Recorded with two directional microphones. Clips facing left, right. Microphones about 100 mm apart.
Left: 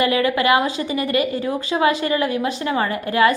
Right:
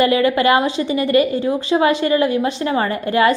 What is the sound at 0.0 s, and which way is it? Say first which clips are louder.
A woman's voice: right 3 dB; 30° right (ahead or behind).